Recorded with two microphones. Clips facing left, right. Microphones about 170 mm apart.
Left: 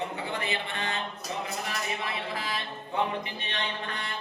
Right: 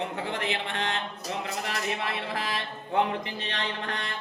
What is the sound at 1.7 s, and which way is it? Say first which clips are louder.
Speech: right 2 dB; 75° right (ahead or behind).